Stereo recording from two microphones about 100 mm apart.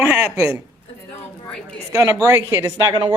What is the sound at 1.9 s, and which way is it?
Speech, 30° right (ahead or behind).